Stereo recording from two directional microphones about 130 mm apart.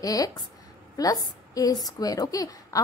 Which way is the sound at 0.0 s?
30° left (ahead or behind).